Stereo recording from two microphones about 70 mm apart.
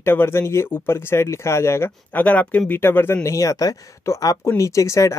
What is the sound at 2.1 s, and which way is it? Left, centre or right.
Speech, left.